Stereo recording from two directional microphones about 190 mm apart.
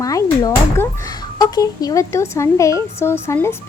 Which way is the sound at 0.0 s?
15° left (ahead or behind).